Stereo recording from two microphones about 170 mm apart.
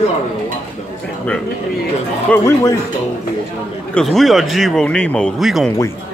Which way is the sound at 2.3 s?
15° left (ahead or behind).